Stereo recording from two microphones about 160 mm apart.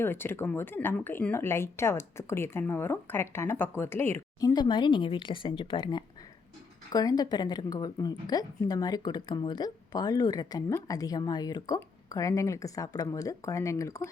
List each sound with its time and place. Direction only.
0.0 s speech: 15° left (ahead or behind)